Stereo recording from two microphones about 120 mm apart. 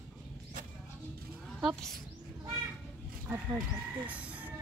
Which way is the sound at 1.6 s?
Centre (ahead or behind).